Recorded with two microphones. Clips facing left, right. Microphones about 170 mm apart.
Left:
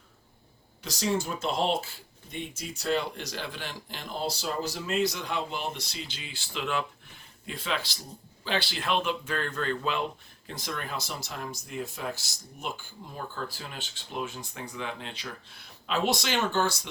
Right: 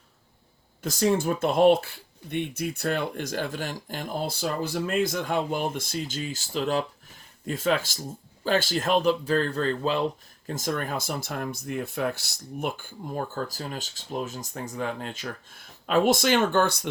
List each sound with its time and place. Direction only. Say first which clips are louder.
0.8 s speech: right 6 dB; 50° right (ahead or behind)